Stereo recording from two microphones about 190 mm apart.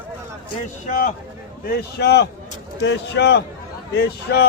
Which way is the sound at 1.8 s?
60° left (ahead or behind).